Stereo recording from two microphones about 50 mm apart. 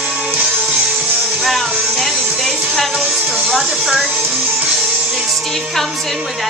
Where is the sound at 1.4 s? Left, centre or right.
Centre.